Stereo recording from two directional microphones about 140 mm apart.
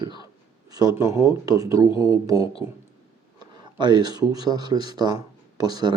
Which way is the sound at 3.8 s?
30° right (ahead or behind).